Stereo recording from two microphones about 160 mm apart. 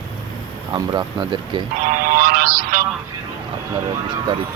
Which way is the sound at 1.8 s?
60° right (ahead or behind).